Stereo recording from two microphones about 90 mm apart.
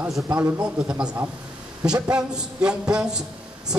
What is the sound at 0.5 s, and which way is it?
A man's voice, 10° right (ahead or behind).